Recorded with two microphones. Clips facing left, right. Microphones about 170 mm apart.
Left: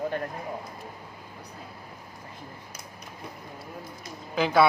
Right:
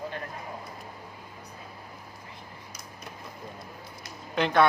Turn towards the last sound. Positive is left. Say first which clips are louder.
# left 1 dB
turn(degrees=5)  # may be behind; listen again after turning